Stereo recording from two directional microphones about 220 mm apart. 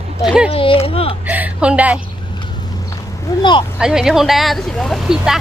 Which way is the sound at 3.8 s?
Centre (ahead or behind).